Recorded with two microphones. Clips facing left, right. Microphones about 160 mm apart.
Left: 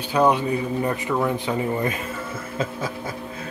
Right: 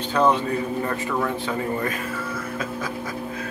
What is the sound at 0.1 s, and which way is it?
A man's voice, 15° left (ahead or behind).